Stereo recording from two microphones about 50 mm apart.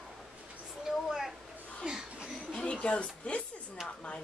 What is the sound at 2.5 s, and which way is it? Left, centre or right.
Speech, left.